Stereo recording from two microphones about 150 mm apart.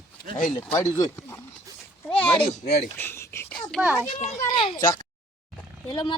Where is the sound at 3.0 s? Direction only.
15° left (ahead or behind).